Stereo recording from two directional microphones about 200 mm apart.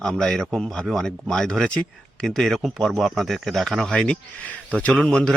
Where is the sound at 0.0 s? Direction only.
5° left (ahead or behind).